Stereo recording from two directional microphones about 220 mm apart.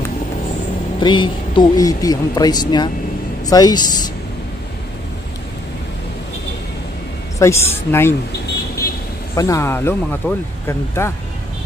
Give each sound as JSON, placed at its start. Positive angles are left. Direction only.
{"t": 0.9, "sound": "speech", "side_deg": 20}
{"t": 7.3, "sound": "speech", "side_deg": 10}
{"t": 9.3, "sound": "speech", "side_deg": 15}